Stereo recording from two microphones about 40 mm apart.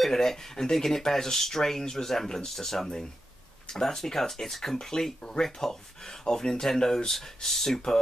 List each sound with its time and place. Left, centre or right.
0.0 s speech: centre